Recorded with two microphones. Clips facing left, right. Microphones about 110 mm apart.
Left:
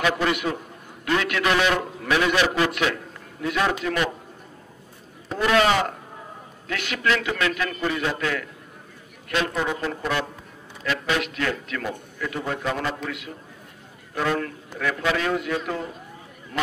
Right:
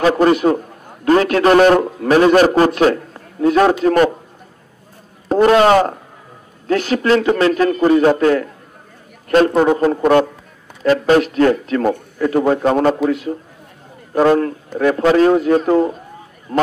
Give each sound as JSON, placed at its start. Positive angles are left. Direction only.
{"t": 0.0, "sound": "a man's voice", "side_deg": -40}
{"t": 5.3, "sound": "a man's voice", "side_deg": -40}